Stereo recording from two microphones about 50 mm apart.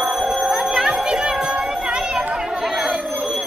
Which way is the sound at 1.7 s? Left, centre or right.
Centre.